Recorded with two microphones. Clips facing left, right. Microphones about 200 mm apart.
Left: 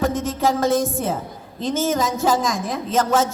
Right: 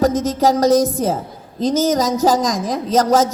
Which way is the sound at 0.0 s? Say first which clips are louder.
Right 5 dB; 40° right (ahead or behind).